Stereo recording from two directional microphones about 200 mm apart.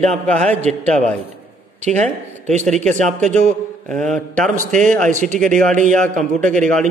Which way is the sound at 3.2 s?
35° right (ahead or behind).